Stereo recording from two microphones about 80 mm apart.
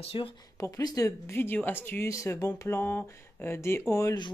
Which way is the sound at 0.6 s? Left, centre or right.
Left.